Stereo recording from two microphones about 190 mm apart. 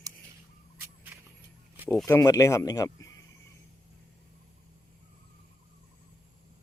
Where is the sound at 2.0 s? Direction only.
15° left (ahead or behind).